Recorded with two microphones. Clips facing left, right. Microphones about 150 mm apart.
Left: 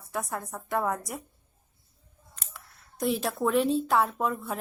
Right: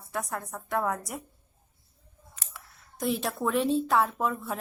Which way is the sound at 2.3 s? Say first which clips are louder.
Even; centre (ahead or behind).